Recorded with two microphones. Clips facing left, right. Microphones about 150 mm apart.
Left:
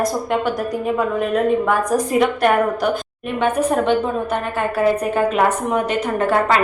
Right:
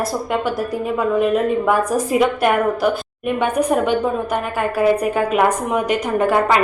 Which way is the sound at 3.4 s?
10° right (ahead or behind).